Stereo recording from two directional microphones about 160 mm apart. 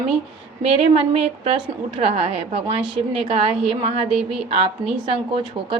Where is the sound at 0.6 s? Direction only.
35° right (ahead or behind).